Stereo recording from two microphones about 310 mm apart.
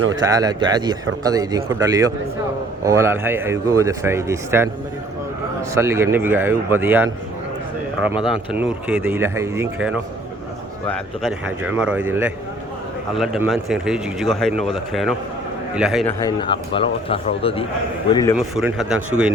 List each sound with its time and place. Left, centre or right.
0.2 s speech: centre
5.7 s speech: centre
8.2 s a man's voice: centre
16.2 s speech: centre
18.3 s a man's voice: centre